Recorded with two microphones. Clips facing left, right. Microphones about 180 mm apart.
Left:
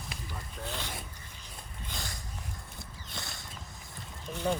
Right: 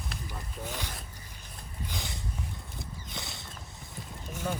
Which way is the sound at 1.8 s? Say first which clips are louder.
Right 4 dB; 20° right (ahead or behind).